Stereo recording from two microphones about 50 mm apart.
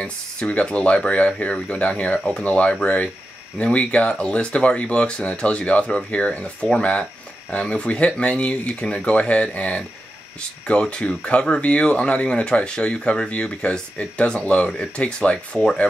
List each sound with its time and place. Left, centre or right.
0.0 s speech: left